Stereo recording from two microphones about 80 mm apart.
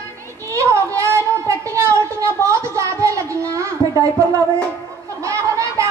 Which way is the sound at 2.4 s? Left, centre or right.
Right.